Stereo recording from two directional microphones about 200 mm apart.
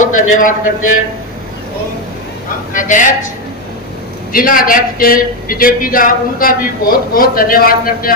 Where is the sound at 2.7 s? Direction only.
40° left (ahead or behind).